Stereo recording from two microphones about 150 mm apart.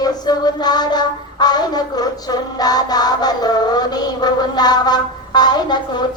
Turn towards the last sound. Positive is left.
turn(degrees=30)  # may be behind; listen again after turning